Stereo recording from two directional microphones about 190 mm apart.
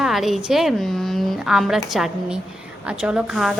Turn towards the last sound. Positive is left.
turn(degrees=-5)  # may be behind; listen again after turning